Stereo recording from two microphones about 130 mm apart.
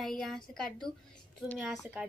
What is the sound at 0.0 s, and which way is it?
Speech, 5° left (ahead or behind).